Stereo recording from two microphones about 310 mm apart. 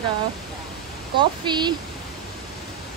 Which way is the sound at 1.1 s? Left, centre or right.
Centre.